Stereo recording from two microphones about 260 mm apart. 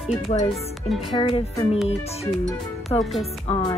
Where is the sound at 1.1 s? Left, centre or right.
Centre.